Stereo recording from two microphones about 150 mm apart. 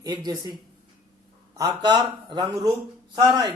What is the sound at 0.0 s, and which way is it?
Speech, 25° right (ahead or behind).